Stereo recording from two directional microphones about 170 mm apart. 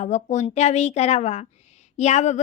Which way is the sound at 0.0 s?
45° left (ahead or behind).